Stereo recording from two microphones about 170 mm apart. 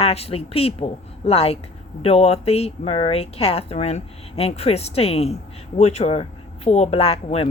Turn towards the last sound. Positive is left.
turn(degrees=35)  # may be behind; listen again after turning